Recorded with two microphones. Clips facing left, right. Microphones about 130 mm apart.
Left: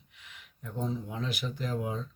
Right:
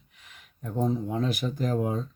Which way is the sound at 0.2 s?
40° right (ahead or behind).